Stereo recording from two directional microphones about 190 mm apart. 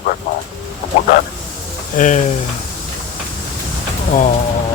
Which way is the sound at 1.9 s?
40° left (ahead or behind).